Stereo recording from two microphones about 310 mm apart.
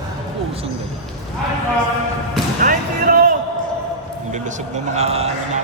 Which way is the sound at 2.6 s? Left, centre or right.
Right.